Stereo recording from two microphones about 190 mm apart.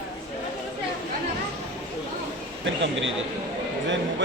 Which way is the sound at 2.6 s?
75° right (ahead or behind).